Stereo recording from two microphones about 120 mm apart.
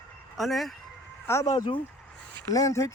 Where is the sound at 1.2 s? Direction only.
25° left (ahead or behind).